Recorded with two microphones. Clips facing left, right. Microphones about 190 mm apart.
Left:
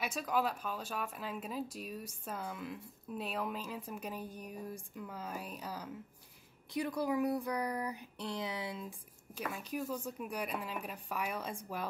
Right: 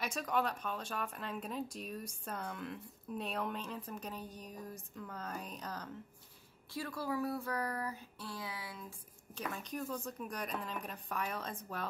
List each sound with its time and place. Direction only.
0.0 s speech: centre (ahead or behind); by 8.9 s 20° left (ahead or behind)
9.3 s speech: 10° left (ahead or behind)